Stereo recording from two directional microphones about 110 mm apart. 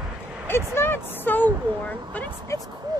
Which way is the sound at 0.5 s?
20° left (ahead or behind).